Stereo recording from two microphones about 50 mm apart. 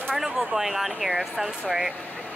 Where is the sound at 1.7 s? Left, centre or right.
Right.